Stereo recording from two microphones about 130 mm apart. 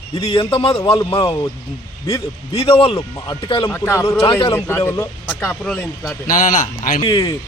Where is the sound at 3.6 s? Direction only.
20° left (ahead or behind).